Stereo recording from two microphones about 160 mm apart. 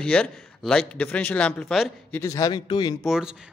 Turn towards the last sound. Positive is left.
turn(degrees=-5)  # may be behind; listen again after turning